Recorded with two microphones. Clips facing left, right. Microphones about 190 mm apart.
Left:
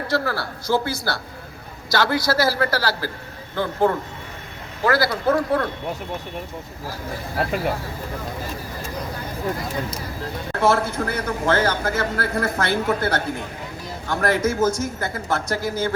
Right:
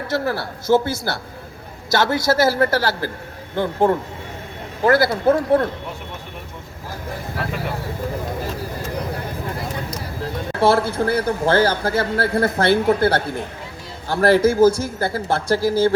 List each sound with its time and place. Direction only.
0.1 s speech: 20° right (ahead or behind)
10.6 s speech: 30° right (ahead or behind)